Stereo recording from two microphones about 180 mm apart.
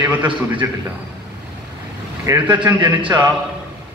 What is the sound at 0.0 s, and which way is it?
Speech, 10° right (ahead or behind).